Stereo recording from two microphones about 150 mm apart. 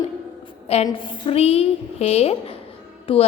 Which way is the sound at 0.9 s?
35° left (ahead or behind).